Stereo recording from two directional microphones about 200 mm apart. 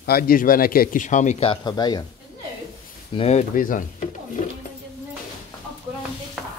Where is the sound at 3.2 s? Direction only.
35° left (ahead or behind).